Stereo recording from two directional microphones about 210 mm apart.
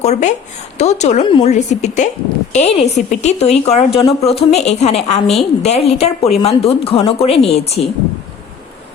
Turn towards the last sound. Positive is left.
turn(degrees=30)  # may be behind; listen again after turning